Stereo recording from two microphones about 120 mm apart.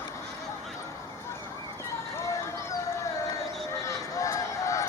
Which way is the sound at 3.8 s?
25° left (ahead or behind).